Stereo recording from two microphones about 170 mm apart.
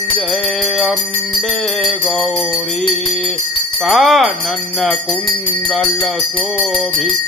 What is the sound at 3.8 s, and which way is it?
Music, centre (ahead or behind).